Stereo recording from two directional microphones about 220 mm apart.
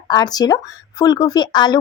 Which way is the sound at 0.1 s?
20° left (ahead or behind).